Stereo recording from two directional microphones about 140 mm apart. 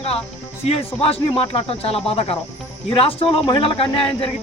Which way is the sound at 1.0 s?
45° left (ahead or behind).